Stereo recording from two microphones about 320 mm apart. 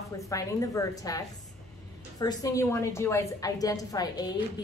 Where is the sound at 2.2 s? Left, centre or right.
Centre.